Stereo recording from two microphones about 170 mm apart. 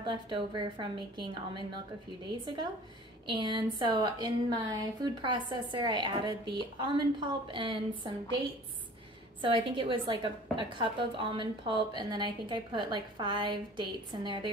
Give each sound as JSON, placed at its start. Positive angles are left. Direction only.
{"t": 0.0, "sound": "a woman's voice", "side_deg": -30}
{"t": 9.4, "sound": "a woman's voice", "side_deg": -30}